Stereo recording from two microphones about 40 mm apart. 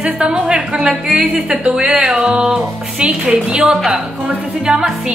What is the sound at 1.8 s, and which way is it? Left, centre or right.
Speech, centre.